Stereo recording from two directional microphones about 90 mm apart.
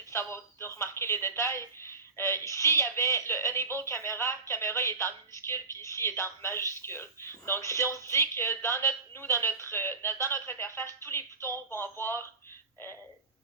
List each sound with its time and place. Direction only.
0.1 s speech: 30° left (ahead or behind)